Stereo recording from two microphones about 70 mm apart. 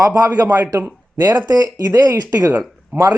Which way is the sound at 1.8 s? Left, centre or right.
Right.